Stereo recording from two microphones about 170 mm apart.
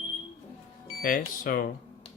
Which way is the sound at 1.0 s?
55° left (ahead or behind).